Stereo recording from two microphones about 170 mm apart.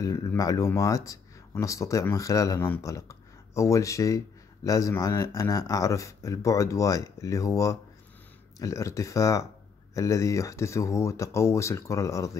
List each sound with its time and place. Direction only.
0.0 s speech: 20° left (ahead or behind)